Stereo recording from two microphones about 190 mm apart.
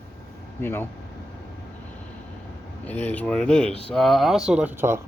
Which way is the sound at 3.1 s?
5° left (ahead or behind).